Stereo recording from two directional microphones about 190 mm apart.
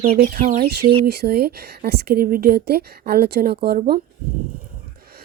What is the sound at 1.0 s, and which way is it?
A woman's voice, 55° right (ahead or behind).